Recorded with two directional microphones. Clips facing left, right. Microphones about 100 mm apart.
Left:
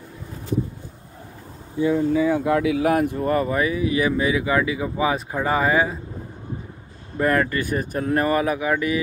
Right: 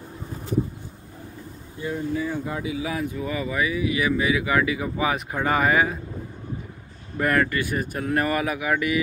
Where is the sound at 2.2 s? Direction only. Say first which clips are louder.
Left 9 dB; 90° left; by 3.0 s 60° left (ahead or behind).